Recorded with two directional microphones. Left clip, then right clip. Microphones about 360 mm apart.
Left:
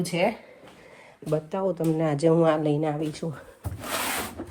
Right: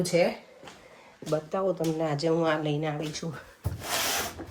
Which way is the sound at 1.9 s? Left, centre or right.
Left.